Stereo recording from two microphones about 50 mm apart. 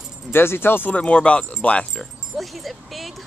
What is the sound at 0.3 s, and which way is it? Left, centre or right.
Speech, left.